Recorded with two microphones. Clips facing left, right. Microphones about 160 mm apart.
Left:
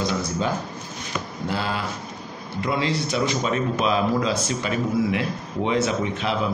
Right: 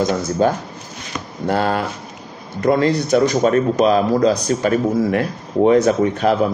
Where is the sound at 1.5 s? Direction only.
50° right (ahead or behind).